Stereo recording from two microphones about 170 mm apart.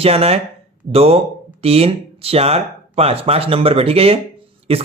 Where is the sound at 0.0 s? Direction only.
35° right (ahead or behind).